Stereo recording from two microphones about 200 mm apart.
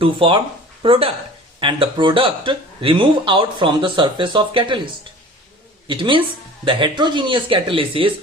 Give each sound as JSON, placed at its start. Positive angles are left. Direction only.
{"t": 0.0, "sound": "speech", "side_deg": -25}
{"t": 5.9, "sound": "speech", "side_deg": -25}